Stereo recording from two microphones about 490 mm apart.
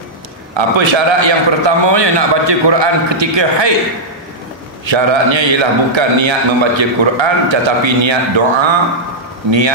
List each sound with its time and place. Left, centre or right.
0.6 s a man's voice: right
4.8 s a man's voice: right